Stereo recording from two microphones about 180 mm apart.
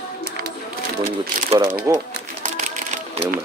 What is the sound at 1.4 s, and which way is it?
Speech, 25° right (ahead or behind).